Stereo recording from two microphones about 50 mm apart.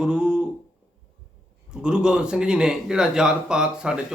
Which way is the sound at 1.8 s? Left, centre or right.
Centre.